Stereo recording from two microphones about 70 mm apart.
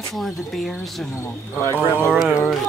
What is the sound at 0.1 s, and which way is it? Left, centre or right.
Speech, centre.